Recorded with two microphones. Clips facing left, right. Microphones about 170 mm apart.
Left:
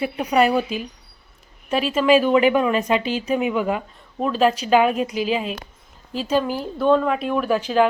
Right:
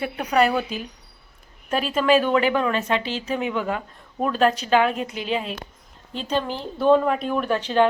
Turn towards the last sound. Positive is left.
turn(degrees=5)  # may be behind; listen again after turning